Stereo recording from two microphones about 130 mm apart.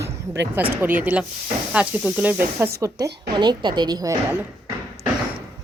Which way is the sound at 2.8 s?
25° right (ahead or behind).